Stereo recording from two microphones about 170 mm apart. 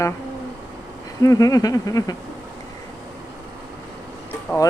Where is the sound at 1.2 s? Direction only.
20° left (ahead or behind).